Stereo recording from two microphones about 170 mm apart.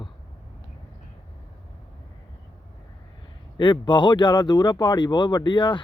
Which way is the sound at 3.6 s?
30° left (ahead or behind).